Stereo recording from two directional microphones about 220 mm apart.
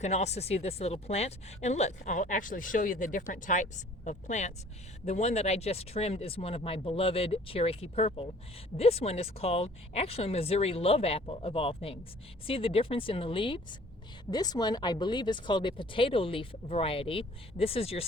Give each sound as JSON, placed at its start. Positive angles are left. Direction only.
{"t": 0.0, "sound": "speech", "side_deg": 30}